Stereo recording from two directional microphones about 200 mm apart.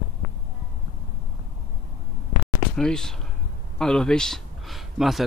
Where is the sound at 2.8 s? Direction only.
5° left (ahead or behind).